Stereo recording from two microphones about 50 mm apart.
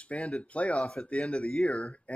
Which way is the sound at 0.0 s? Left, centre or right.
Left.